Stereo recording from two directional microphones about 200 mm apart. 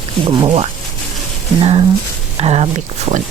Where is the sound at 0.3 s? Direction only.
25° right (ahead or behind).